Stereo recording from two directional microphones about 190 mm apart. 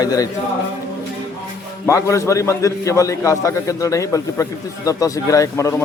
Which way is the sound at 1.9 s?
15° left (ahead or behind).